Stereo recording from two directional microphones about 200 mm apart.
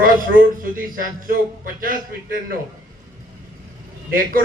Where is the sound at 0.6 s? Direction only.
45° right (ahead or behind).